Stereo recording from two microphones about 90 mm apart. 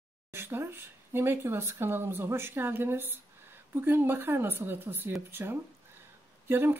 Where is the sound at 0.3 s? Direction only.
25° right (ahead or behind).